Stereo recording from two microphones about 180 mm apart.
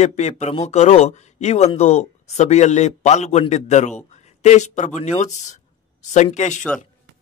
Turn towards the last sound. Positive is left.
turn(degrees=40)  # may be behind; listen again after turning